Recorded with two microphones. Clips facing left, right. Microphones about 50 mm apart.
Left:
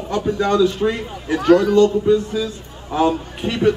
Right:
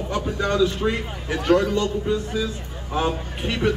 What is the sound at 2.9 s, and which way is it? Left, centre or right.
Speech, centre.